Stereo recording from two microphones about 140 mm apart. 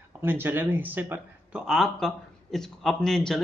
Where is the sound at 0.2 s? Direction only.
15° right (ahead or behind).